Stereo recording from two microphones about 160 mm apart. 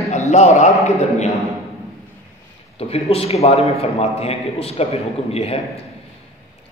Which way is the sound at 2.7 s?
40° left (ahead or behind).